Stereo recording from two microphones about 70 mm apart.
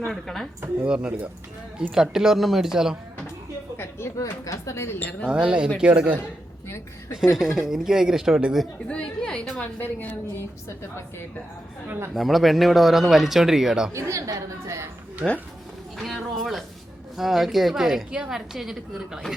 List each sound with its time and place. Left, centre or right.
0.1 s a woman's voice: centre
0.9 s speech: centre
3.8 s a sound: left
4.2 s speech: left
4.9 s a woman's voice: left
5.3 s speech: centre
7.3 s speech: centre
8.9 s a woman's voice: centre
9.6 s a woman's voice: left
12.1 s a woman's voice: centre
13.9 s a woman's voice: right
15.2 s speech: right
16.0 s a woman's voice: centre